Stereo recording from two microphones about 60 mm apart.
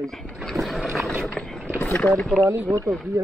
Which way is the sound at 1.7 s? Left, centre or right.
Left.